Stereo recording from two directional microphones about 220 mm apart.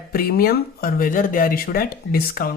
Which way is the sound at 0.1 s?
40° left (ahead or behind).